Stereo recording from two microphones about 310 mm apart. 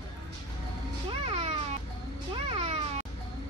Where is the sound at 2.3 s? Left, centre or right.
Centre.